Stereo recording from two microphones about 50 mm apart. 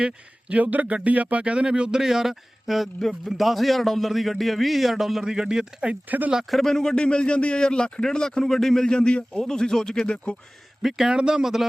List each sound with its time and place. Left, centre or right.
0.0 s speech: right
0.6 s speech: right
2.0 s a man's voice: centre
5.9 s speech: right
6.5 s speech: centre
10.8 s speech: centre